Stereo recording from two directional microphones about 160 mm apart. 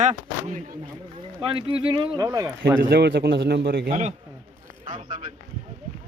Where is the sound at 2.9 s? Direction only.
90° right; by 4.1 s 55° right (ahead or behind).